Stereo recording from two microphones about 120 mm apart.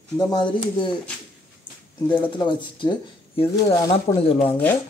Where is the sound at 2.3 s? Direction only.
40° left (ahead or behind).